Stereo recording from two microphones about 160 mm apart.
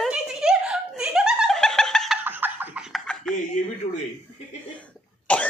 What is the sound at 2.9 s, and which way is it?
Chuckle, 5° left (ahead or behind).